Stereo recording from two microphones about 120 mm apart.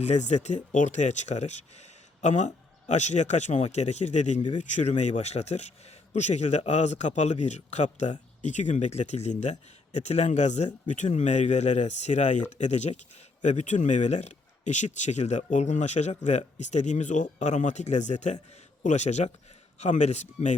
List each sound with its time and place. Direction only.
0.0 s speech: 75° left (ahead or behind)
4.5 s speech: 85° left
8.4 s speech: 80° left